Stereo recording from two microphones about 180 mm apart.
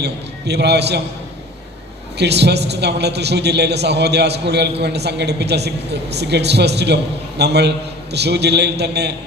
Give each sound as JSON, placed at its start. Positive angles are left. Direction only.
{"t": 0.0, "sound": "a man's voice", "side_deg": -70}
{"t": 2.1, "sound": "a woman's voice", "side_deg": -70}